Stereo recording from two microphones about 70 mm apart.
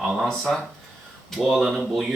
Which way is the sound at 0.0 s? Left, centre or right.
Centre.